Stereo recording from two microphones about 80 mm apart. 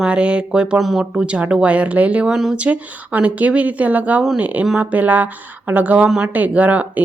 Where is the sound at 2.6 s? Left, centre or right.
Centre.